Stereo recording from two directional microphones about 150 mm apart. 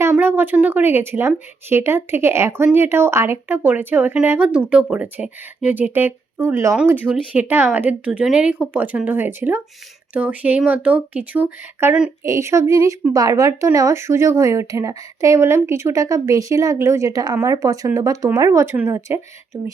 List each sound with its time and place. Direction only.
0.0 s a woman's voice: 15° right (ahead or behind)